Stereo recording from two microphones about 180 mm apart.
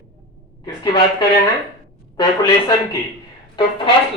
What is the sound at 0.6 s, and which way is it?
Speech, 25° left (ahead or behind).